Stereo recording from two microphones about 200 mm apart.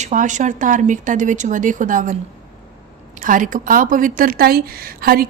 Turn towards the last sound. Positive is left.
turn(degrees=-50)  # may be behind; listen again after turning